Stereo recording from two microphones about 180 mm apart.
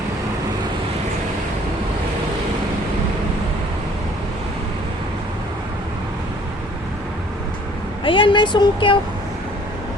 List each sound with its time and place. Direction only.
8.0 s speech: 30° left (ahead or behind)